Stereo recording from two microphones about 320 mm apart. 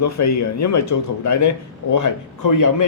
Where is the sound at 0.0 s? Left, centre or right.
Left.